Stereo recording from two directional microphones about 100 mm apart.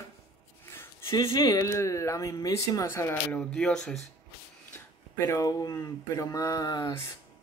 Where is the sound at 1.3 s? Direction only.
30° left (ahead or behind).